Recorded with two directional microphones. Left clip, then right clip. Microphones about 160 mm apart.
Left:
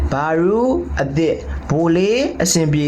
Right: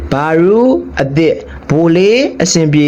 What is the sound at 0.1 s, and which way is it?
Speech, 35° right (ahead or behind).